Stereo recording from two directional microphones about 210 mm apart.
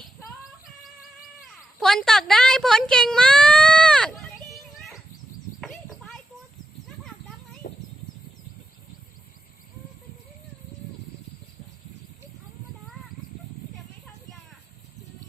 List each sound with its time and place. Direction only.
1.8 s speech: centre (ahead or behind)
5.5 s a sound: centre (ahead or behind)
7.6 s chicken: 45° left (ahead or behind)